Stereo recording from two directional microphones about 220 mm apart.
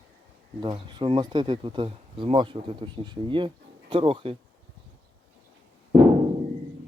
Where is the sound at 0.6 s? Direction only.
20° right (ahead or behind).